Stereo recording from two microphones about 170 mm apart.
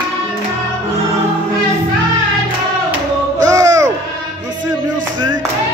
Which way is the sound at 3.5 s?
20° right (ahead or behind).